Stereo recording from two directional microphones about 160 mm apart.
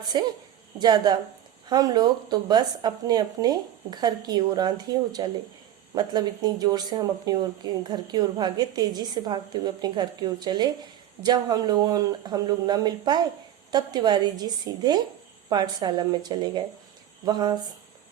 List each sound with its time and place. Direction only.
0.0 s speech: 25° right (ahead or behind)
5.9 s speech: 25° right (ahead or behind)